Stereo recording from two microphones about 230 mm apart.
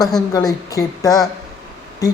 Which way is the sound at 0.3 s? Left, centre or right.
Centre.